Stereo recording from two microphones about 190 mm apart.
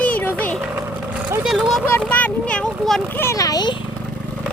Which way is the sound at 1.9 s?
10° left (ahead or behind).